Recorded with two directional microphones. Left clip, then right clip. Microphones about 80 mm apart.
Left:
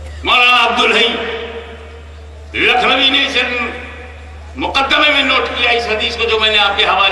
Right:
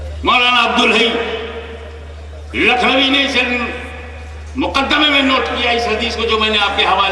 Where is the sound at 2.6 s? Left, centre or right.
Left.